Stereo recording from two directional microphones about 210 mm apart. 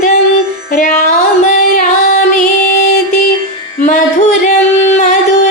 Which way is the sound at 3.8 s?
35° left (ahead or behind).